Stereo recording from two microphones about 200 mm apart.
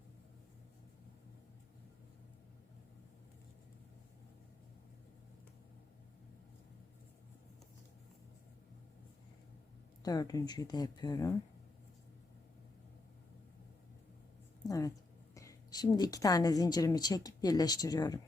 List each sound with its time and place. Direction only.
10.0 s a woman's voice: 20° left (ahead or behind)
14.7 s a sound: 15° left (ahead or behind)
15.4 s a woman's voice: 20° left (ahead or behind)